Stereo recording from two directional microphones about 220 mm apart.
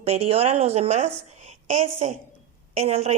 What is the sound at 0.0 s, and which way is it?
Speech, 30° right (ahead or behind).